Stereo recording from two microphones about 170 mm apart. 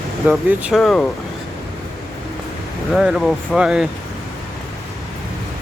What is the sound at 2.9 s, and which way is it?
Speech, centre (ahead or behind).